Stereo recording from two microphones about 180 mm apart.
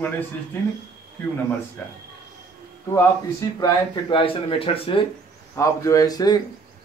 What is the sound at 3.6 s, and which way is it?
Speech, 25° left (ahead or behind).